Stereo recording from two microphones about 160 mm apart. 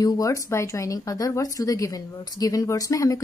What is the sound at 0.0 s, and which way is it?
Speech, 20° left (ahead or behind).